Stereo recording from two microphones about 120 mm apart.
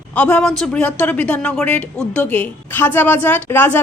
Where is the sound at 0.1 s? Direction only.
10° left (ahead or behind).